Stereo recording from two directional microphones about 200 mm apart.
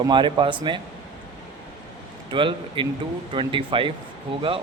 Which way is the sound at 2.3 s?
25° right (ahead or behind).